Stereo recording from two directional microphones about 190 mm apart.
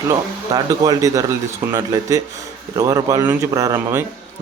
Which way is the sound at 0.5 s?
20° right (ahead or behind).